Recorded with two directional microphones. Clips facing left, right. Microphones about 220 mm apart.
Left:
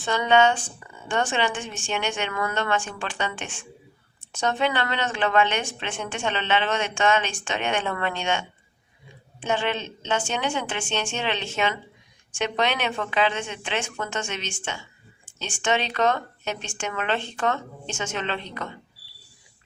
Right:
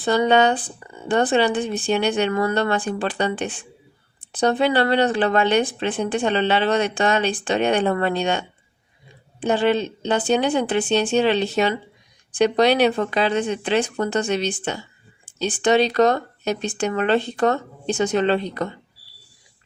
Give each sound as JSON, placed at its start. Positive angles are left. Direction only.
{"t": 0.0, "sound": "speech", "side_deg": -35}